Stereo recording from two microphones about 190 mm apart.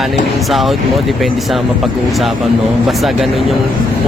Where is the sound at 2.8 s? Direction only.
Centre (ahead or behind).